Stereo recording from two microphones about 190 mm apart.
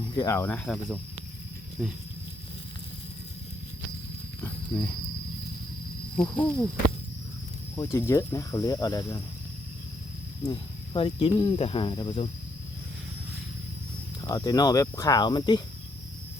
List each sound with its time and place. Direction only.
0.2 s speech: 15° left (ahead or behind); by 1.9 s centre (ahead or behind)
6.3 s speech: 10° left (ahead or behind)
7.8 s speech: 15° left (ahead or behind)
10.4 s speech: 25° left (ahead or behind)
14.2 s speech: 20° left (ahead or behind)